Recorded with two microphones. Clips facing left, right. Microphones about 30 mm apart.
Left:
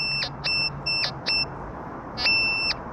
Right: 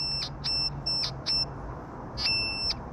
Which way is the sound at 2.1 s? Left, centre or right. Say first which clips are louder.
Left 8 dB; left.